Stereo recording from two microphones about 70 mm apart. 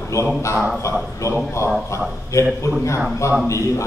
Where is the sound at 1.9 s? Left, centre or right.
Left.